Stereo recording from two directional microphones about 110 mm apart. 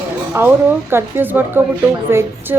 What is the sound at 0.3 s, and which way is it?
A woman's voice, 20° right (ahead or behind).